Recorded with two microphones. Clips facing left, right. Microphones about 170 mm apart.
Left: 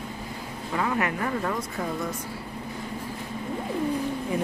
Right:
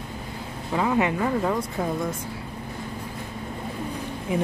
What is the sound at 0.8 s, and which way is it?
Speech, 20° right (ahead or behind).